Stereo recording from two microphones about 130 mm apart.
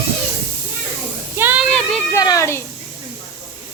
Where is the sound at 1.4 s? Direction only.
20° right (ahead or behind).